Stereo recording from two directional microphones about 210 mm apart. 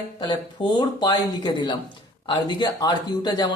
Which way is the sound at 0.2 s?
20° left (ahead or behind).